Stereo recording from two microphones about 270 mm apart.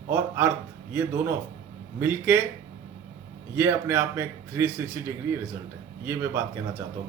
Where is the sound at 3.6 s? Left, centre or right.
Centre.